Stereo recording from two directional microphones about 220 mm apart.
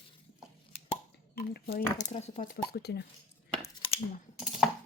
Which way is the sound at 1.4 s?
45° left (ahead or behind).